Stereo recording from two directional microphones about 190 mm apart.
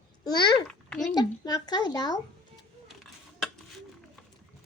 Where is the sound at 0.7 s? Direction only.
5° left (ahead or behind).